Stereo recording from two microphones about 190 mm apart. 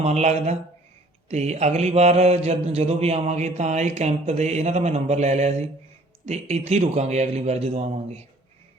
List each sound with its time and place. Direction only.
0.0 s mantra: 35° right (ahead or behind)